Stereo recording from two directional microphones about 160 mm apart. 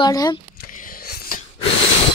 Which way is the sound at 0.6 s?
60° left (ahead or behind).